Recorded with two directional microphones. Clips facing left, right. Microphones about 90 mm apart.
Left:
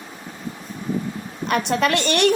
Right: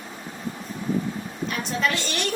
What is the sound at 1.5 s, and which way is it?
Speech, 70° left (ahead or behind).